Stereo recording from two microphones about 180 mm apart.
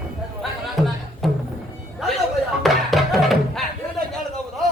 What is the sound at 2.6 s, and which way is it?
Music, centre (ahead or behind).